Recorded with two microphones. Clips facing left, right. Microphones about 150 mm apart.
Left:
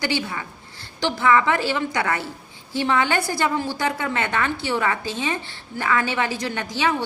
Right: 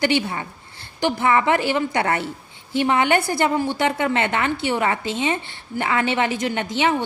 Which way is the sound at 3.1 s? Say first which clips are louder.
Right 3 dB; 55° right (ahead or behind).